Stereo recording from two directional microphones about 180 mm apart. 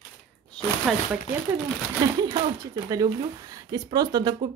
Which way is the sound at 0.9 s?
Centre (ahead or behind).